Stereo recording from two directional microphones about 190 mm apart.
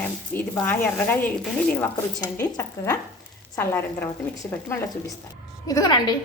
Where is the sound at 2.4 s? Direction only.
10° left (ahead or behind).